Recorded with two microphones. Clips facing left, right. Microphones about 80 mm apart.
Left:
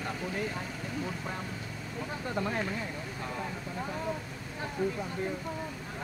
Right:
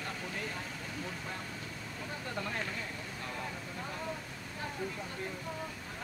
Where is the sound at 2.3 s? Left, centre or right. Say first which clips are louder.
Left 6 dB; left.